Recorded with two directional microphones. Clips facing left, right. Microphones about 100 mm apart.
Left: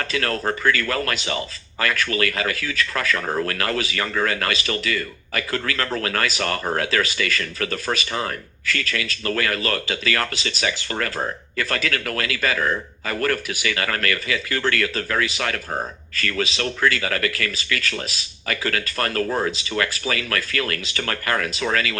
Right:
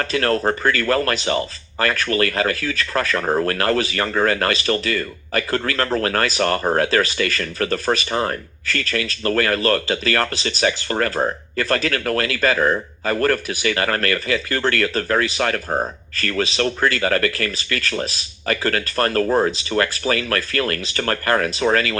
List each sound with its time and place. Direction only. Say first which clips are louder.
0.0 s speech: right 5 dB; 35° right (ahead or behind)